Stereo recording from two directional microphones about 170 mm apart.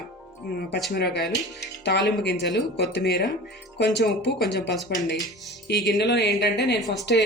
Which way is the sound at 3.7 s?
90° left.